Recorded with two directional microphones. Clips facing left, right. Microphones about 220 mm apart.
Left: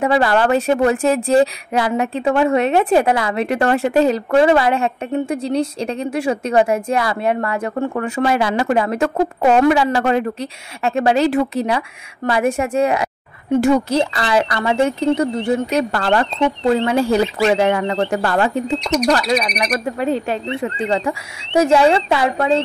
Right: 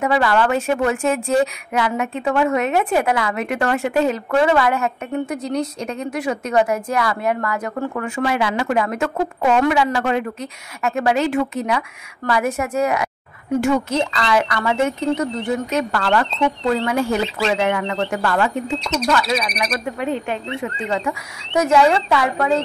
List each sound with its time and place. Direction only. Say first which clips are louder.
0.0 s a woman's voice: left 2 dB; 30° left (ahead or behind)
18.8 s speech: left 5 dB; 15° left (ahead or behind)
19.6 s speech: left 3 dB; 35° left (ahead or behind)